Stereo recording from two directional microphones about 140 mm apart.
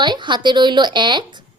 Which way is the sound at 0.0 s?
35° right (ahead or behind).